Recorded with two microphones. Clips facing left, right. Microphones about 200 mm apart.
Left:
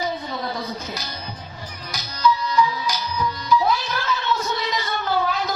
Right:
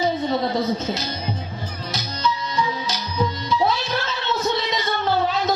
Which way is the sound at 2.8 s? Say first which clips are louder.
Right 1 dB; 25° right (ahead or behind).